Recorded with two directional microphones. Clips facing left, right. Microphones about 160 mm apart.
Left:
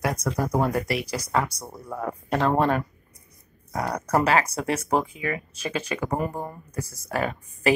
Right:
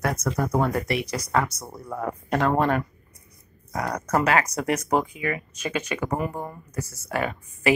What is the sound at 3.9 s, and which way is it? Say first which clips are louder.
Speech: left 1 dB; 10° left (ahead or behind).